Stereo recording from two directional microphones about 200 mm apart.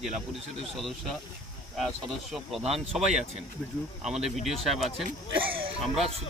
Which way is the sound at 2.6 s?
30° right (ahead or behind).